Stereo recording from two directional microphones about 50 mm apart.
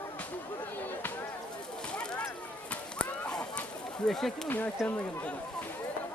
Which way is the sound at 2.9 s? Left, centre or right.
Left.